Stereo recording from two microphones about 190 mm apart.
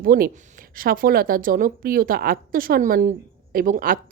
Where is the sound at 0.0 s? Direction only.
50° right (ahead or behind).